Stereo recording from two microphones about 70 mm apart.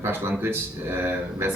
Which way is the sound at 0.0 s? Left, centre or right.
Right.